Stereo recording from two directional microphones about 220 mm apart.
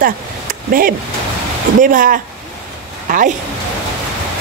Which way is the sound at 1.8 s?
40° right (ahead or behind).